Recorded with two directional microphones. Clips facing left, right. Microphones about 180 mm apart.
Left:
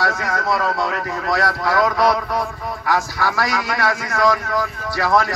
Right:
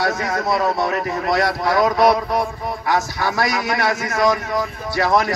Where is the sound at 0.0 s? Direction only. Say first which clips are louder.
Right 1 dB; 25° right (ahead or behind).